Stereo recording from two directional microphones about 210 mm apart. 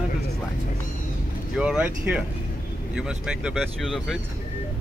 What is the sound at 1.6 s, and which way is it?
Speech, 5° right (ahead or behind).